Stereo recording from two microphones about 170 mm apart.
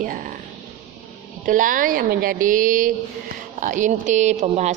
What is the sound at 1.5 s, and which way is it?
A woman's voice, 50° right (ahead or behind).